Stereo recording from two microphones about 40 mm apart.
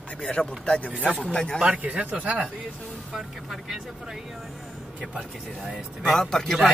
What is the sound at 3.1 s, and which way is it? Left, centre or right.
Speech, centre.